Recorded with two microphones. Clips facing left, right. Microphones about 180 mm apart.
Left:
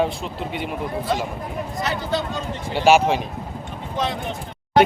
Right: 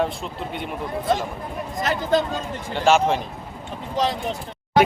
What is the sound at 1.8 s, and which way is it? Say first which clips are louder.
Speech: right 4 dB; 45° right (ahead or behind).